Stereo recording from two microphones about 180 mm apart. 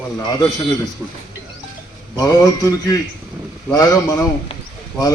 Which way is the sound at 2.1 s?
20° left (ahead or behind).